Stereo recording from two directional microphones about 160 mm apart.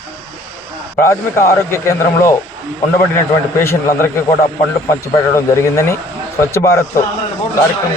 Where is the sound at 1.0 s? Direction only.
15° left (ahead or behind).